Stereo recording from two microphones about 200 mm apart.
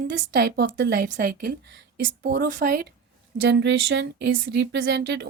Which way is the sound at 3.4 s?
60° right (ahead or behind).